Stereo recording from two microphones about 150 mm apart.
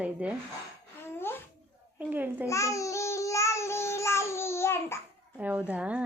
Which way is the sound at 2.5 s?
20° left (ahead or behind).